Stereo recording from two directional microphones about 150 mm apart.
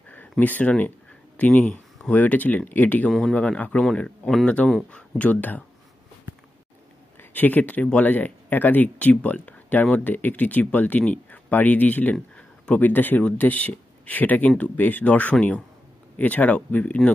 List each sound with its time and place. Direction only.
0.1 s speech: 10° left (ahead or behind)
7.2 s speech: 10° left (ahead or behind)